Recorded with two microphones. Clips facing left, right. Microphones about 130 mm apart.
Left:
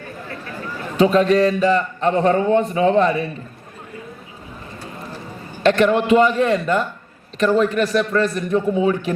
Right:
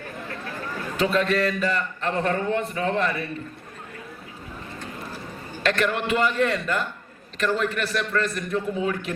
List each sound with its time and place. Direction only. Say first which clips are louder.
0.9 s a man's voice: left 8 dB; 35° left (ahead or behind)
5.6 s a man's voice: left 9 dB; 40° left (ahead or behind)